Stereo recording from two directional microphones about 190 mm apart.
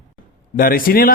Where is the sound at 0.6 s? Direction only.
50° left (ahead or behind).